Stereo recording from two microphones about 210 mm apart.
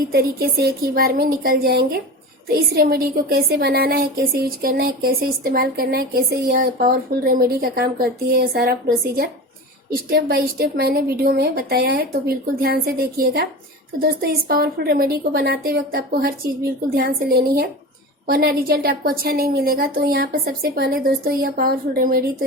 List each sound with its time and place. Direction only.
0.1 s a woman's voice: 50° right (ahead or behind)